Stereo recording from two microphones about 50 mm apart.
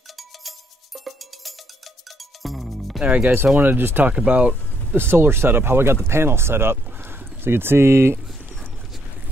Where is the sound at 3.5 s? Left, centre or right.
Right.